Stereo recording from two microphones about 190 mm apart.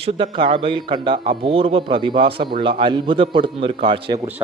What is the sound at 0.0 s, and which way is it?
A man's voice, 25° right (ahead or behind).